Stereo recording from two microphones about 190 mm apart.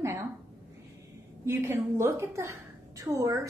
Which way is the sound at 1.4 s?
15° right (ahead or behind).